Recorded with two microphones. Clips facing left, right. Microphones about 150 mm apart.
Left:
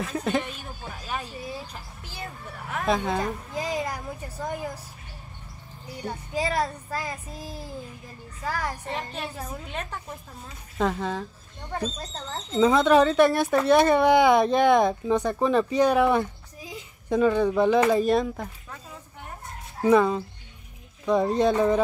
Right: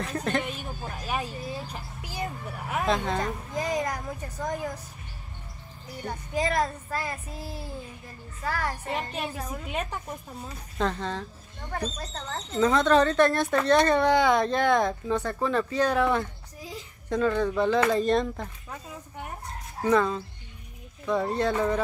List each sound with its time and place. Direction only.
0.0 s speech: 5° left (ahead or behind)
1.7 s a sound: 10° right (ahead or behind)
2.9 s speech: 10° left (ahead or behind)
6.0 s speech: 10° left (ahead or behind)
8.8 s a woman's voice: 10° right (ahead or behind)
10.8 s speech: 10° left (ahead or behind)
11.9 s speech: 25° left (ahead or behind)
12.6 s speech: 10° left (ahead or behind)
18.0 s speech: 5° left (ahead or behind)
19.8 s speech: 15° left (ahead or behind)